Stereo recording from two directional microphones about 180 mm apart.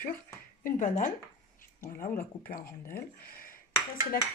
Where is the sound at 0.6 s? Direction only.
45° left (ahead or behind).